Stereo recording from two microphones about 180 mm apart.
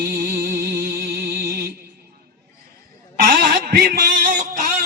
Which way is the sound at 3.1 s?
55° right (ahead or behind).